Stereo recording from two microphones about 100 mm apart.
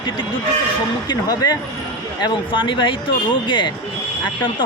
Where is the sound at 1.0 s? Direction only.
40° left (ahead or behind).